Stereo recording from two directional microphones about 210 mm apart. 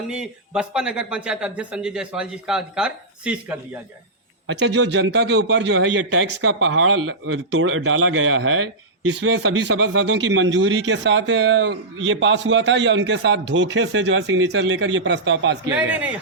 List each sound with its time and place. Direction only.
0.1 s speech: 5° right (ahead or behind)
4.4 s a man's voice: 55° right (ahead or behind)
15.7 s speech: 5° right (ahead or behind)